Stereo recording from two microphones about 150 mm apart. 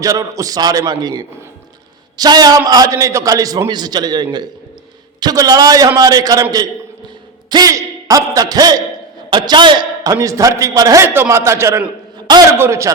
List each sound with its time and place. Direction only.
0.0 s a man's voice: 20° right (ahead or behind)
12.1 s a sound: 30° right (ahead or behind)
12.5 s speech: 15° right (ahead or behind)